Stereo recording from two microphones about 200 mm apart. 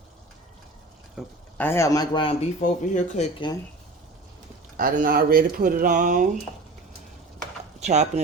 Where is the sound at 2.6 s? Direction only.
40° left (ahead or behind).